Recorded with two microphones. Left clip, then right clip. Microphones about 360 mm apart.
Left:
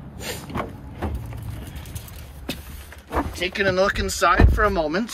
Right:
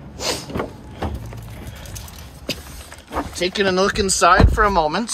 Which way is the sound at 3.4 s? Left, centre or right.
Centre.